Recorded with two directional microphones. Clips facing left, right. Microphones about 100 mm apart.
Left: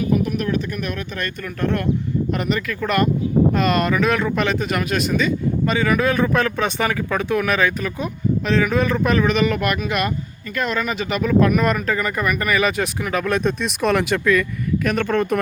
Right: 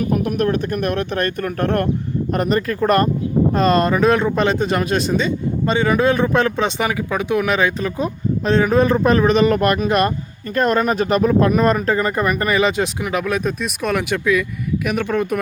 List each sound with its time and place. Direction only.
0.0 s speech: 50° right (ahead or behind)
2.3 s speech: 40° right (ahead or behind); by 13.2 s 15° right (ahead or behind)
13.2 s speech: 5° right (ahead or behind)